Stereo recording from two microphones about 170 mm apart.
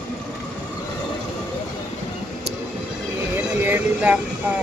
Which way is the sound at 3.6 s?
10° right (ahead or behind).